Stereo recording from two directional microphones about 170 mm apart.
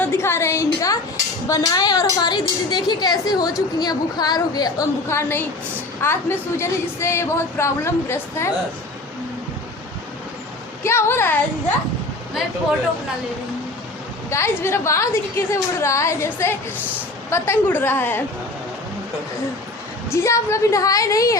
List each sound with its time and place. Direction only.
0.0 s a sound: 15° left (ahead or behind)
1.5 s a woman's voice: 20° left (ahead or behind)
10.8 s a woman's voice: 15° left (ahead or behind)
14.3 s a woman's voice: 15° left (ahead or behind)
20.1 s a woman's voice: 15° left (ahead or behind)